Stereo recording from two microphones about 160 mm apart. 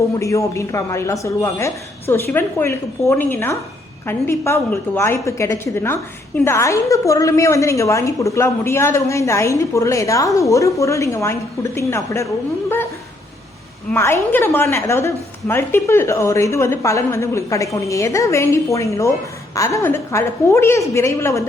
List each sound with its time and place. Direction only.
0.2 s a woman's voice: 20° left (ahead or behind)
13.9 s a woman's voice: 15° left (ahead or behind)